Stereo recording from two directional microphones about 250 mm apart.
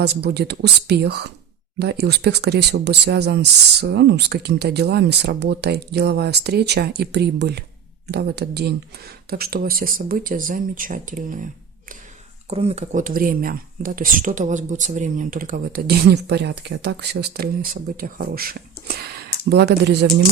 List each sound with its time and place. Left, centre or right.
0.0 s speech: right
12.5 s speech: right